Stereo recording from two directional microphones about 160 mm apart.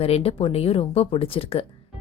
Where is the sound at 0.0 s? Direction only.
40° left (ahead or behind).